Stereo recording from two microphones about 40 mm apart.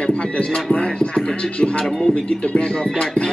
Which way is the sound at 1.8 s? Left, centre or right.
Centre.